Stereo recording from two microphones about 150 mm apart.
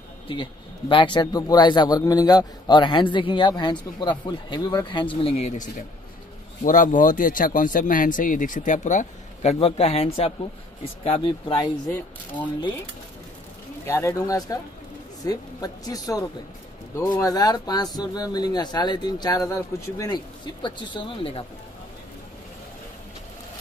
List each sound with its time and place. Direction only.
0.3 s a man's voice: 35° left (ahead or behind)
13.8 s speech: 20° left (ahead or behind)
20.6 s a man's voice: 30° left (ahead or behind)